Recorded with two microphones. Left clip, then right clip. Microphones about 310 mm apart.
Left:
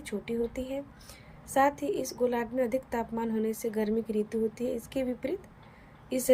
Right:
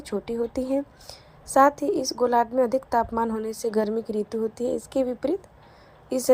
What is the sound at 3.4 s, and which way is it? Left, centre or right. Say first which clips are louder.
Speech: right 6 dB; centre.